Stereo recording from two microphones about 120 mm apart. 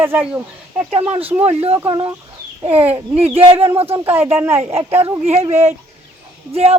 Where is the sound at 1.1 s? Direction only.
55° right (ahead or behind).